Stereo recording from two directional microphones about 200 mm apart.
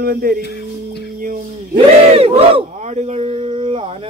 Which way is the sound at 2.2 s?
30° right (ahead or behind).